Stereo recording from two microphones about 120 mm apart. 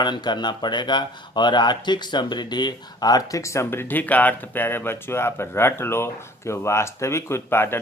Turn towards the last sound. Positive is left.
turn(degrees=20)  # may be behind; listen again after turning